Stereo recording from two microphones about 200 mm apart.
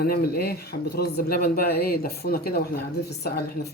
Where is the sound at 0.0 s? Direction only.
50° left (ahead or behind).